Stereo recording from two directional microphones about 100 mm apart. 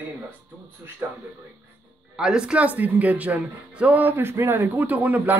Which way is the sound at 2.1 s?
5° right (ahead or behind).